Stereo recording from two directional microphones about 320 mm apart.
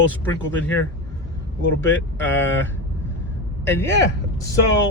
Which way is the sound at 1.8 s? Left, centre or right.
Centre.